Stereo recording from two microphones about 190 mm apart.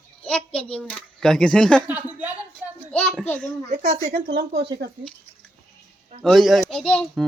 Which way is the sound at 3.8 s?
55° right (ahead or behind).